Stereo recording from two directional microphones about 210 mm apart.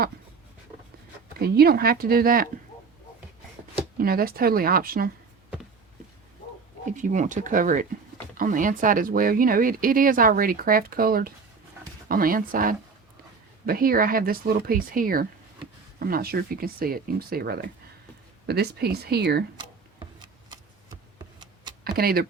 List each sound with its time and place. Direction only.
1.4 s speech: 50° right (ahead or behind)
3.9 s speech: 45° right (ahead or behind)
6.8 s speech: 35° right (ahead or behind)
19.5 s a sound: 20° right (ahead or behind)
21.9 s speech: 45° right (ahead or behind)